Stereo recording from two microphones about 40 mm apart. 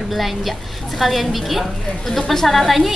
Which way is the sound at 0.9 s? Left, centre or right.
Centre.